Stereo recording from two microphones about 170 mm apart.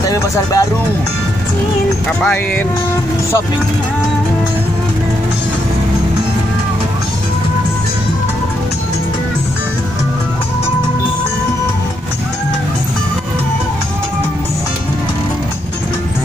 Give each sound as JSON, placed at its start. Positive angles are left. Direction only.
{"t": 0.1, "sound": "speech", "side_deg": 20}
{"t": 2.2, "sound": "speech", "side_deg": 10}